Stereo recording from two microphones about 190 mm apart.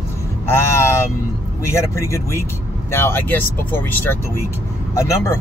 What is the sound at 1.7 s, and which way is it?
Speech, 15° left (ahead or behind).